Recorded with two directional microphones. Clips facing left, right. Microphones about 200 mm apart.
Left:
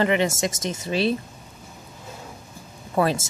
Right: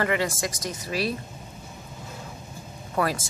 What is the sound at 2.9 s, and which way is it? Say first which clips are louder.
Speech: left 4 dB; 25° left (ahead or behind).